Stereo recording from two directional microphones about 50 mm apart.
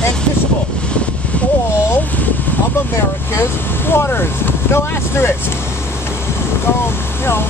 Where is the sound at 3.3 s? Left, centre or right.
Left.